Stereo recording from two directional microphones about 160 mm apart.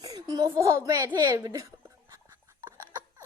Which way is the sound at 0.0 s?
20° right (ahead or behind).